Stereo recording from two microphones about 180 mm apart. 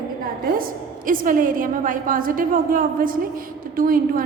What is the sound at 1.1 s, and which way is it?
A woman's voice, 50° right (ahead or behind).